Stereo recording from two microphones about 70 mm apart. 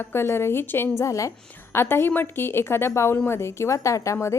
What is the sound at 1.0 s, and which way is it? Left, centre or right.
Speech, left.